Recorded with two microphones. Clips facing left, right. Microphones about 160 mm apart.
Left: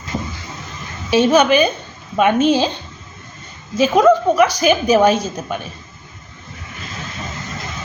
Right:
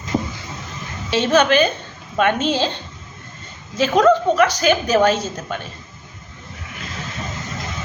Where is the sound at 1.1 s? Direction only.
10° left (ahead or behind).